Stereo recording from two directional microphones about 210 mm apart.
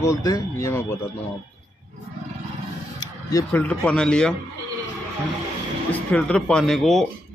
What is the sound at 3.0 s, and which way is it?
Speech, 10° left (ahead or behind).